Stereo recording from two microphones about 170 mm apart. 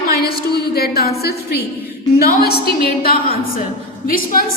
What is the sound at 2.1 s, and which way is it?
A woman's voice, 65° left (ahead or behind).